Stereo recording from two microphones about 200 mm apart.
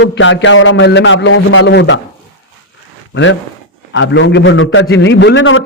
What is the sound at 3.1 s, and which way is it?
Speech, 65° left (ahead or behind).